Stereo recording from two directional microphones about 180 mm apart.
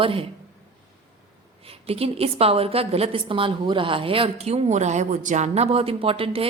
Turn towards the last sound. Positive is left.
turn(degrees=-30)  # may be behind; listen again after turning